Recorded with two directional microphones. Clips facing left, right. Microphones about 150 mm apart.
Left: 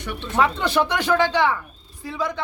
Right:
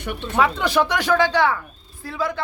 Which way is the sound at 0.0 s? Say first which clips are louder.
Right 2 dB; 50° right (ahead or behind).